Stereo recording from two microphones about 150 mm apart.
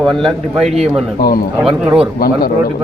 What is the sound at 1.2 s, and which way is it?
Speech, 90° left.